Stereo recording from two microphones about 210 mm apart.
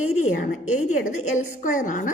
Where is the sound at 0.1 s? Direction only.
35° left (ahead or behind).